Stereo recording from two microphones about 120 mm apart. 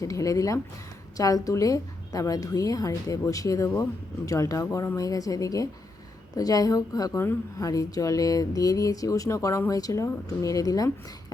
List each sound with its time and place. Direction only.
0.0 s a woman's voice: 30° left (ahead or behind)